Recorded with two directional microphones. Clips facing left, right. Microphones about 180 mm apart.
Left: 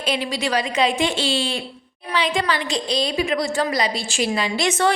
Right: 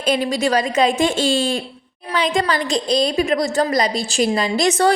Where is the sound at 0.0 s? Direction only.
45° right (ahead or behind).